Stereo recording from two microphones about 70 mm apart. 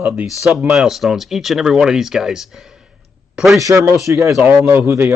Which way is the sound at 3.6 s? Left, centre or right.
Right.